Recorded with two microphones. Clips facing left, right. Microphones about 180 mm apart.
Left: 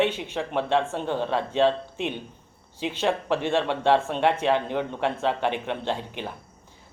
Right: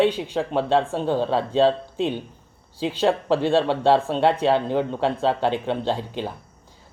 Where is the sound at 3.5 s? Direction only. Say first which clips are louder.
Right 3 dB; 35° right (ahead or behind).